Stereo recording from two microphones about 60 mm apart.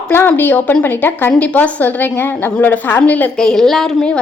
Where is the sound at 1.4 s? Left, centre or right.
Left.